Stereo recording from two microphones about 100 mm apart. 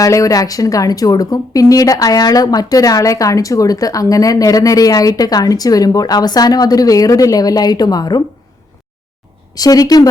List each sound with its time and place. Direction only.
0.0 s a woman's voice: 35° left (ahead or behind)
9.6 s a woman's voice: 40° left (ahead or behind)